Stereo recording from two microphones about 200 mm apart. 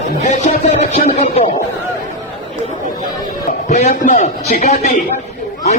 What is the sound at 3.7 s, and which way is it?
Speech, 35° left (ahead or behind).